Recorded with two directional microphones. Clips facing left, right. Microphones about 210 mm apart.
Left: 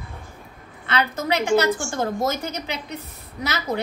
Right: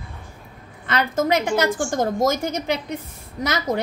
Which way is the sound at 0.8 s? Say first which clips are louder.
Right 3 dB; 45° right (ahead or behind).